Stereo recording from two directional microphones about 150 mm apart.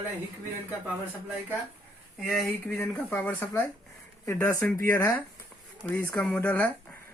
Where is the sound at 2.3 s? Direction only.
5° left (ahead or behind).